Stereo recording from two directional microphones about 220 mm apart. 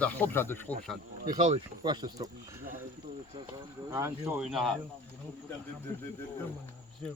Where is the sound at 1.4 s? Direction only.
30° right (ahead or behind).